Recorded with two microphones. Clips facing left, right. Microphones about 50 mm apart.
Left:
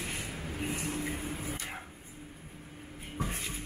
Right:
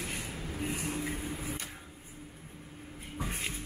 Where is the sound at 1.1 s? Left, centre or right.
Centre.